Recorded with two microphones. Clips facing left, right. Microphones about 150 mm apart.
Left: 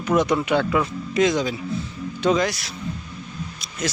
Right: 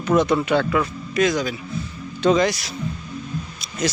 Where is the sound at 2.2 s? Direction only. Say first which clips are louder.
Right 3 dB; 5° left (ahead or behind).